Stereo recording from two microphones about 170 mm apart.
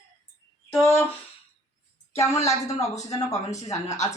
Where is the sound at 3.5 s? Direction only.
40° left (ahead or behind).